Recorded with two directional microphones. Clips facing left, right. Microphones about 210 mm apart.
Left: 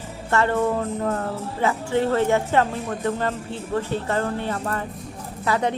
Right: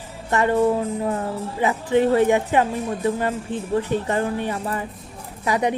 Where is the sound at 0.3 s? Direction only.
15° right (ahead or behind).